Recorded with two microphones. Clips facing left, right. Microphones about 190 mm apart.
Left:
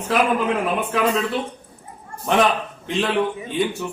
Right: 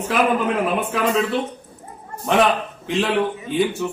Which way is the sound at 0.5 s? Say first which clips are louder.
Right 1 dB; 5° right (ahead or behind).